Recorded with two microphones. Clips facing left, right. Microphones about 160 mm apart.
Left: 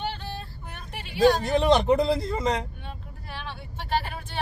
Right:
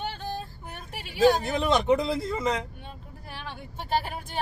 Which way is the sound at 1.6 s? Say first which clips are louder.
Left 5 dB; 40° left (ahead or behind).